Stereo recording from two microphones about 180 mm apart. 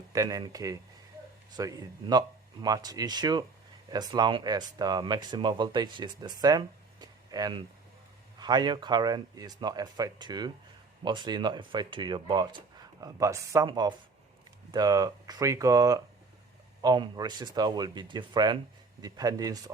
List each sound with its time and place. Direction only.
0.1 s speech: 20° right (ahead or behind)